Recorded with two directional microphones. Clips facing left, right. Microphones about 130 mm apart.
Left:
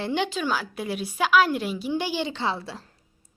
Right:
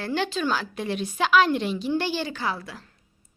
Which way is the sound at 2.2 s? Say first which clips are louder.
Left 2 dB; 25° left (ahead or behind).